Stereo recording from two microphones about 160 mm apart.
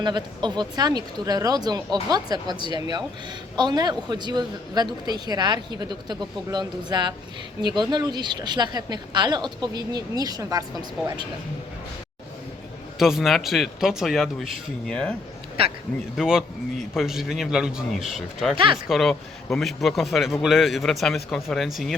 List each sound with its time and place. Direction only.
0.0 s speech: 30° right (ahead or behind)
13.0 s speech: 5° right (ahead or behind)
16.1 s speech: 5° right (ahead or behind)
18.5 s speech: 30° right (ahead or behind)
18.9 s speech: centre (ahead or behind)